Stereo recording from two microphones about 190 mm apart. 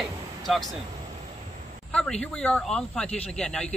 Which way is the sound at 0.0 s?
Centre (ahead or behind).